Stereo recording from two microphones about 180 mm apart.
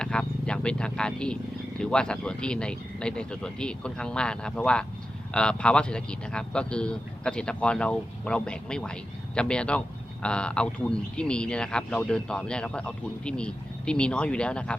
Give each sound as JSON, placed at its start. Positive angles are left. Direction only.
{"t": 0.0, "sound": "a man's voice", "side_deg": 5}